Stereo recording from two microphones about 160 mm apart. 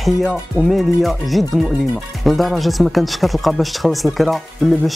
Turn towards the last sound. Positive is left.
turn(degrees=0)  # may be behind; listen again after turning